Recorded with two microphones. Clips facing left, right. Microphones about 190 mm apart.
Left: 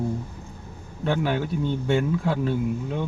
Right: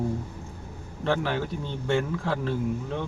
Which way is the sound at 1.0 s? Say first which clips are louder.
Left 2 dB; 10° left (ahead or behind).